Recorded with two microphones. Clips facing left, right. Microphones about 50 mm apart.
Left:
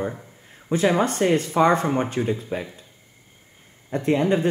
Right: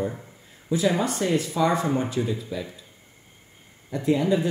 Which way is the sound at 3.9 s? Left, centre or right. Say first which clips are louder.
Left 2 dB; left.